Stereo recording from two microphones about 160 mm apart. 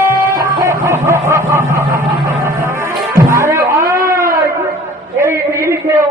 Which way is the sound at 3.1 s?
15° right (ahead or behind).